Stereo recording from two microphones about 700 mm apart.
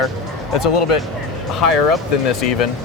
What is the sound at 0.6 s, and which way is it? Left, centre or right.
Speech, left.